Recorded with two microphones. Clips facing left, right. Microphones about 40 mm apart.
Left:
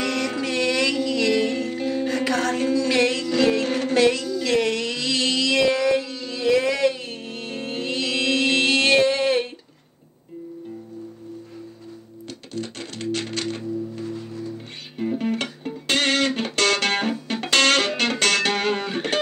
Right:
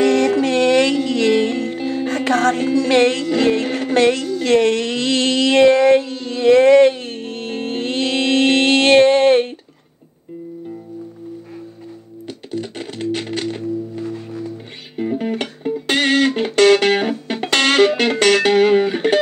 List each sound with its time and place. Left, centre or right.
0.0 s music: right
2.0 s music: right
2.5 s music: centre
2.9 s music: right
3.6 s music: centre
4.1 s a sound: right
12.5 s music: centre
14.0 s music: right
15.0 s music: centre